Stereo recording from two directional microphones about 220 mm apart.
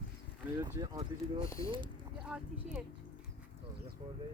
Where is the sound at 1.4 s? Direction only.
15° left (ahead or behind).